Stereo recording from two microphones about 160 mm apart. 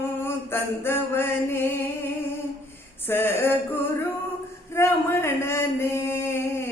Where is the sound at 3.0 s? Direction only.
15° left (ahead or behind).